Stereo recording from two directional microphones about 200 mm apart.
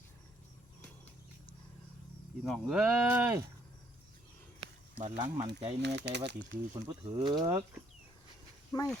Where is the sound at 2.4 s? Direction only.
Centre (ahead or behind).